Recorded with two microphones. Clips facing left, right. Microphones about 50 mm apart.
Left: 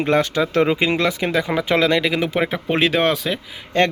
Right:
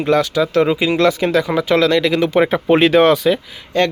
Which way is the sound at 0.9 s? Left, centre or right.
Centre.